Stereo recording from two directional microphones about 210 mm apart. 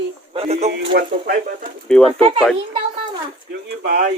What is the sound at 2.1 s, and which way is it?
Speech, 25° right (ahead or behind).